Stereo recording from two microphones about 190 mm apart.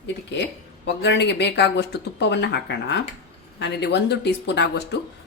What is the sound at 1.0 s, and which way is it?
Speech, 65° left (ahead or behind).